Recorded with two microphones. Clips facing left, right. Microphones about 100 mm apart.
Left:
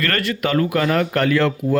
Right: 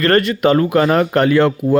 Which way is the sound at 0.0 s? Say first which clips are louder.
Right 8 dB; 25° right (ahead or behind).